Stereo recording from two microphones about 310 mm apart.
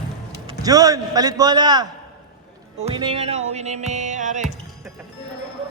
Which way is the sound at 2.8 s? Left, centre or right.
Centre.